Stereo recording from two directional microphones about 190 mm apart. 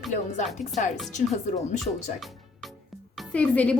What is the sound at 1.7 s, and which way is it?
A woman's voice, centre (ahead or behind).